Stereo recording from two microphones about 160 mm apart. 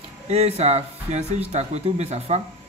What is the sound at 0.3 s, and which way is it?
Speech, 40° right (ahead or behind).